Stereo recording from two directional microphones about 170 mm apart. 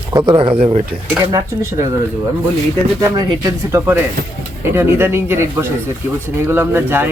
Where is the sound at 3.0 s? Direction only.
20° right (ahead or behind).